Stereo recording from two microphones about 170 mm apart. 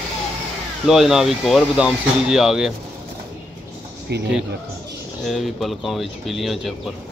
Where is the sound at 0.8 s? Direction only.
Centre (ahead or behind).